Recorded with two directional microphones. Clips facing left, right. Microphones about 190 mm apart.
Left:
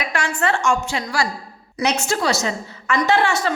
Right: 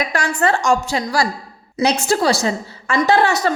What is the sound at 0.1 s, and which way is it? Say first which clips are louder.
A woman's voice: right 3 dB; 40° right (ahead or behind).